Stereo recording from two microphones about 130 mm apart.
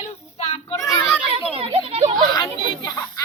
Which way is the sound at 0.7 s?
25° left (ahead or behind).